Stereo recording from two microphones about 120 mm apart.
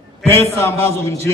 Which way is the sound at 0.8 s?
20° left (ahead or behind).